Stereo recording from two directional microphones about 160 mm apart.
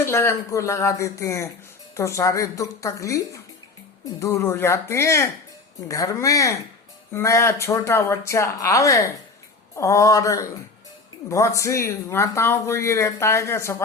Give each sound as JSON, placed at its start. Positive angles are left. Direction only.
{"t": 0.0, "sound": "speech", "side_deg": 15}